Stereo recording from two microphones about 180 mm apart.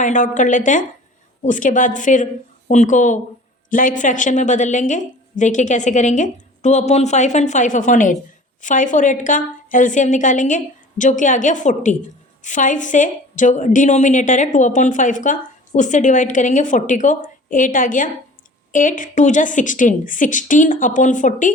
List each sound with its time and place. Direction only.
0.0 s a woman's voice: 45° left (ahead or behind)